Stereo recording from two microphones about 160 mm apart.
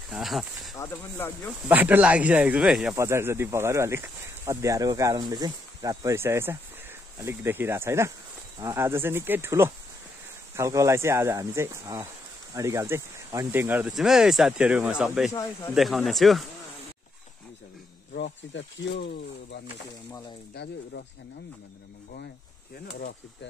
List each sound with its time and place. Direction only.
0.1 s speech: centre (ahead or behind)
0.7 s speech: 20° left (ahead or behind)
1.7 s speech: 10° right (ahead or behind)
3.0 s speech: 15° right (ahead or behind); by 16.4 s centre (ahead or behind)
18.9 s speech: 90° left